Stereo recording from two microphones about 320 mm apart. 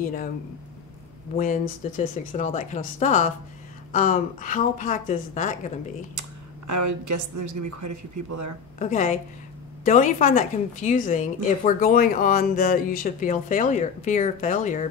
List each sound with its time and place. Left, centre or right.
0.0 s speech: left
1.3 s speech: left
6.7 s a woman's voice: right
8.7 s speech: left